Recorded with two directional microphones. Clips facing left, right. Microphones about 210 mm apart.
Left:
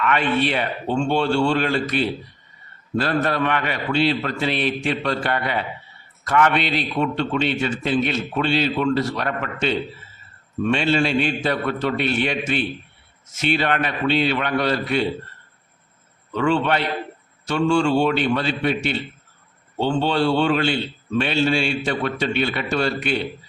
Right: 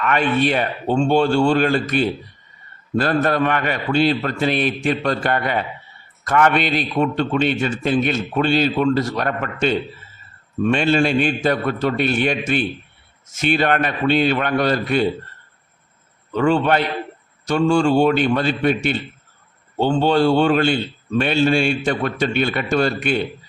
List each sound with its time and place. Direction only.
0.0 s a man's voice: 45° right (ahead or behind)
16.3 s a man's voice: 45° right (ahead or behind)